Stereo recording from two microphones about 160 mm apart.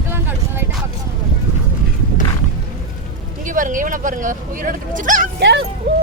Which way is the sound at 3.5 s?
55° right (ahead or behind).